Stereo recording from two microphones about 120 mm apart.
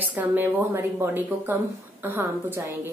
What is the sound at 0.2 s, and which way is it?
A woman's voice, 15° right (ahead or behind).